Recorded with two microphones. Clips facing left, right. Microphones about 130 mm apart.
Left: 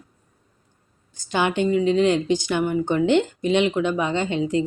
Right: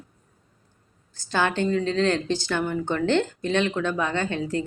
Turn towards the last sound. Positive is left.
turn(degrees=20)  # may be behind; listen again after turning